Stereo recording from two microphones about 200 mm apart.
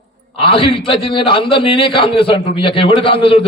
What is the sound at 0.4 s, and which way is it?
A man's voice, 25° left (ahead or behind).